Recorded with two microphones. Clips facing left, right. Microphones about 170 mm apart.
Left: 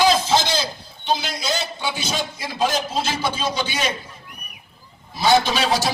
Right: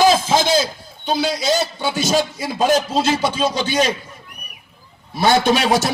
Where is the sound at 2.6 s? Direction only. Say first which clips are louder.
Right 5 dB; 55° right (ahead or behind).